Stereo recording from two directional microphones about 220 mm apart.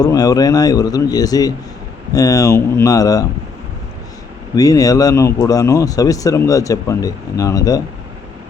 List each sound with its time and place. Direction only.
0.0 s speech: 15° left (ahead or behind)
4.5 s speech: 15° left (ahead or behind)